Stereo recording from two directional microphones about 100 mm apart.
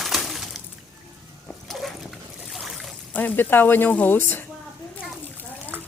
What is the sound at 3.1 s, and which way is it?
Speech, 20° left (ahead or behind).